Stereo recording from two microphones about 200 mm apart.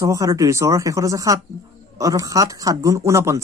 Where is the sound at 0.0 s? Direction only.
15° right (ahead or behind).